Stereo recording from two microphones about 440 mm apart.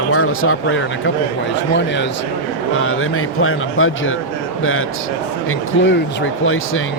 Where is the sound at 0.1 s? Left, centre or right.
Left.